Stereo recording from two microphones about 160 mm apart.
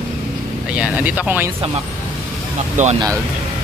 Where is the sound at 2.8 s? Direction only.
50° right (ahead or behind).